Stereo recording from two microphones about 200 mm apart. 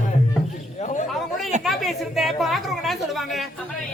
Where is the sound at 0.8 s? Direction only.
40° left (ahead or behind).